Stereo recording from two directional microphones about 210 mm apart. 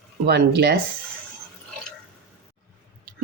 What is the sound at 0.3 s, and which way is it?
Speech, 55° right (ahead or behind).